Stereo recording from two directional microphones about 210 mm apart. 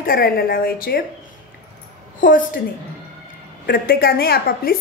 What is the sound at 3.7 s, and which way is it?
A woman's voice, 45° left (ahead or behind).